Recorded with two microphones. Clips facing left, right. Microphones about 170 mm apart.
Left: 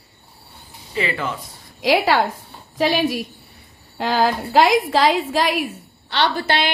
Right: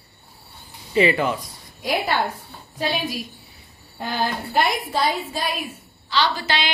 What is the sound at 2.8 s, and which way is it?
Speech, 70° left (ahead or behind).